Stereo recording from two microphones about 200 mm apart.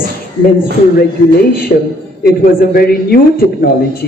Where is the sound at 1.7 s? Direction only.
35° left (ahead or behind).